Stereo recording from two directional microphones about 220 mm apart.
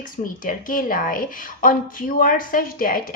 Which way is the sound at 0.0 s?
40° left (ahead or behind).